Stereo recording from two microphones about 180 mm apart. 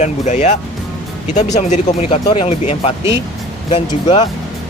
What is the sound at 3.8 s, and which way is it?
Speech, 25° left (ahead or behind).